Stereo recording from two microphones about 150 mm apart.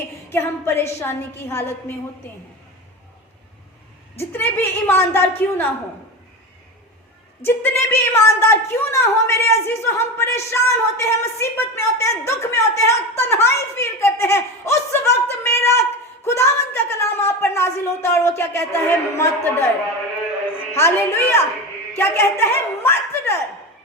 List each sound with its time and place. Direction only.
0.3 s a woman's voice: 15° left (ahead or behind)
4.2 s a woman's voice: 15° left (ahead or behind)
7.4 s a woman's voice: 15° left (ahead or behind)
20.7 s a woman's voice: 15° left (ahead or behind)